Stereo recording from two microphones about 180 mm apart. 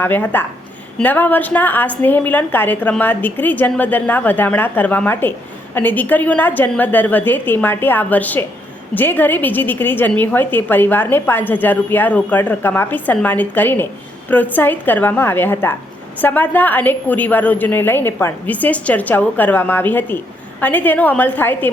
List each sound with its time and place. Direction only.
0.0 s a woman's voice: 10° left (ahead or behind)